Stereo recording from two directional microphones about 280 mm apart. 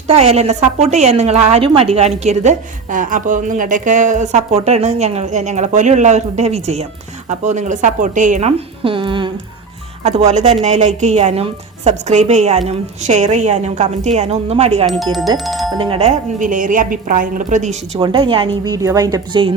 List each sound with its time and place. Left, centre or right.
0.1 s a woman's voice: right
14.8 s speech: centre
15.8 s a woman's voice: right